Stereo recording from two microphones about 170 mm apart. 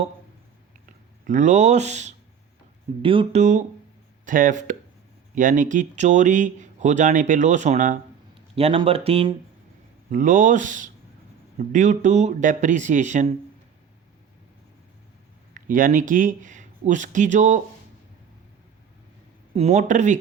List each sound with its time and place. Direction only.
1.3 s speech: 45° right (ahead or behind)
3.0 s speech: 30° right (ahead or behind)
4.3 s speech: 50° right (ahead or behind)
8.5 s speech: 35° right (ahead or behind)
10.1 s speech: 50° right (ahead or behind)
15.5 s speech: 50° right (ahead or behind)
19.5 s speech: 40° right (ahead or behind)